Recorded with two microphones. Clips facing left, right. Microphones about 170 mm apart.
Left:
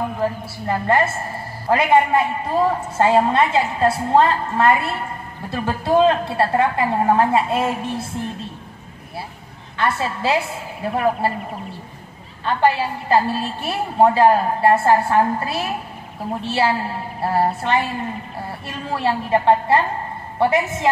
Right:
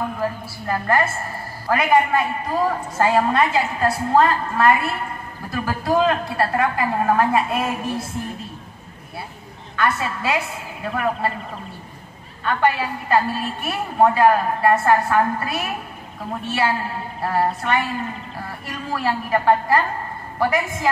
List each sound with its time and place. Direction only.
0.2 s a woman's voice: 25° left (ahead or behind)
9.8 s a woman's voice: 30° left (ahead or behind)
12.4 s a woman's voice: 30° left (ahead or behind)